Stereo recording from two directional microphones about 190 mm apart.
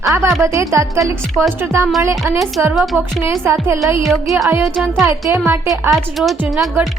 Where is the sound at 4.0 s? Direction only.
Centre (ahead or behind).